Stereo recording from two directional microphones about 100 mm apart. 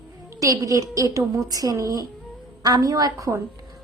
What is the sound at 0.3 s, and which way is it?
A woman's voice, 35° right (ahead or behind).